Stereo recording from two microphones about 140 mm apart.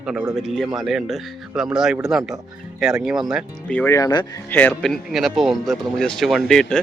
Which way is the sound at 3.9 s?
25° left (ahead or behind).